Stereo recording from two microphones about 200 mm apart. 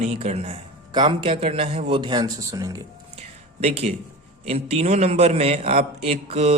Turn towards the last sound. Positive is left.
turn(degrees=-30)  # may be behind; listen again after turning